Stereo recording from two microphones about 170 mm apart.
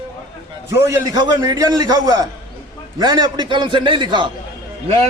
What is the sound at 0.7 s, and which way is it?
A man's voice, 20° right (ahead or behind).